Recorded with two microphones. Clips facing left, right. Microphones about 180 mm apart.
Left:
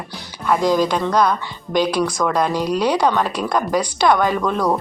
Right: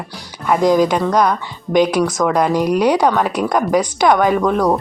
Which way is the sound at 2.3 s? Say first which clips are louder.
Right 4 dB; 15° right (ahead or behind).